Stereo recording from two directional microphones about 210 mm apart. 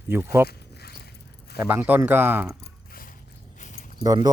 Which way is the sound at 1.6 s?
5° right (ahead or behind).